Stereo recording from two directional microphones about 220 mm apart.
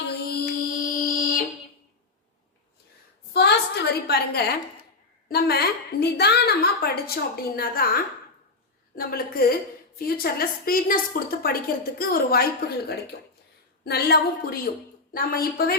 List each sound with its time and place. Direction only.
0.1 s mantra: 40° left (ahead or behind)
3.3 s a sound: 45° left (ahead or behind)
5.3 s a woman's voice: 45° left (ahead or behind)
9.0 s a woman's voice: 45° left (ahead or behind)
13.8 s a woman's voice: 45° left (ahead or behind)